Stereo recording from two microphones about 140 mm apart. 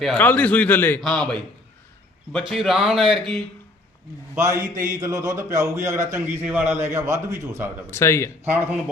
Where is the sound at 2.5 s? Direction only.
Centre (ahead or behind).